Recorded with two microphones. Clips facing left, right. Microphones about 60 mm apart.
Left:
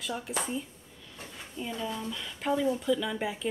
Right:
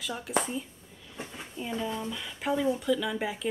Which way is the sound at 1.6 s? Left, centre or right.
Centre.